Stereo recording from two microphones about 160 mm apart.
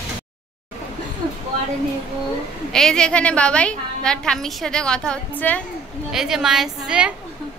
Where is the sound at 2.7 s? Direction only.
5° left (ahead or behind).